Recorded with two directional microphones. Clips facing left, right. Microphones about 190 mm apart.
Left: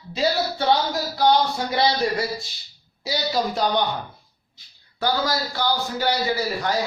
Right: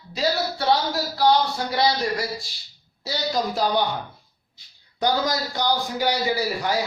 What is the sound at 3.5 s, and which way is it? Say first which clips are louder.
Speech: even; 5° right (ahead or behind).